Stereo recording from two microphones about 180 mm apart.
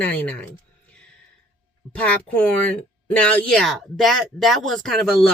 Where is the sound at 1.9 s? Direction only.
5° left (ahead or behind).